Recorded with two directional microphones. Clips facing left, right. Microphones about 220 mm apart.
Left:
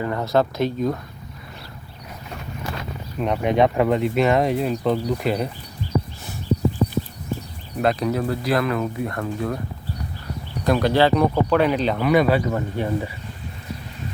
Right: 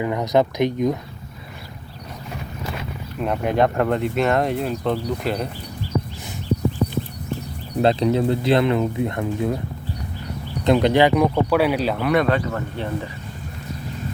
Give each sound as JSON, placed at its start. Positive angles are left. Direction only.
{"t": 0.0, "sound": "speech", "side_deg": -15}
{"t": 3.2, "sound": "speech", "side_deg": 0}
{"t": 7.8, "sound": "speech", "side_deg": -25}
{"t": 10.6, "sound": "speech", "side_deg": -20}